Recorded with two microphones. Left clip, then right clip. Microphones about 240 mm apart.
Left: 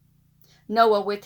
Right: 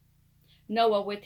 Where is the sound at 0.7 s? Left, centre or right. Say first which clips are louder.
Left 6 dB; left.